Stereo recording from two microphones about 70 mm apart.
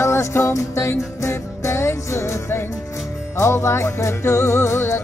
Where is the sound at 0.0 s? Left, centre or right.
Left.